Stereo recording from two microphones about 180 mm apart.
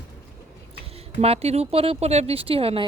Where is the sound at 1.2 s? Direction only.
35° right (ahead or behind).